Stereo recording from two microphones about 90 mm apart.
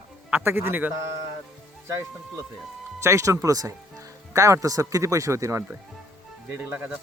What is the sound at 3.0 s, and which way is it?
Speech, 30° right (ahead or behind).